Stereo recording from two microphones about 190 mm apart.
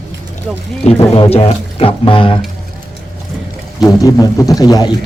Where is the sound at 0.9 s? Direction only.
30° left (ahead or behind).